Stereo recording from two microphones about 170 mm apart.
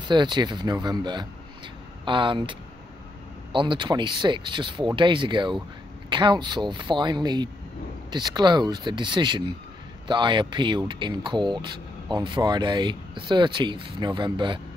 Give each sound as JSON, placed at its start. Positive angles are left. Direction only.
{"t": 0.0, "sound": "speech", "side_deg": -25}
{"t": 3.5, "sound": "speech", "side_deg": -30}